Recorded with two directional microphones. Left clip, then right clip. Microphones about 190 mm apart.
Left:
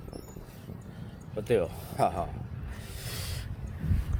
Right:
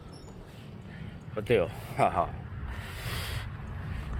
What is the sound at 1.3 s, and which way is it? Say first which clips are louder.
Speech: right 1 dB; 5° left (ahead or behind).